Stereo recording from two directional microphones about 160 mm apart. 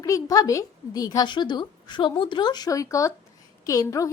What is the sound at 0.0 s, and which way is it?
Speech, 20° left (ahead or behind).